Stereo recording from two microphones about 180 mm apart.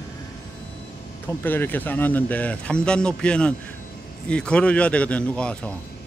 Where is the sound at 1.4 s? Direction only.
10° left (ahead or behind).